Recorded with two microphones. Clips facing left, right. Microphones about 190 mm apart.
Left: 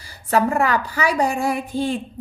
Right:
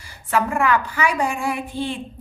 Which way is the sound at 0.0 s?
35° left (ahead or behind).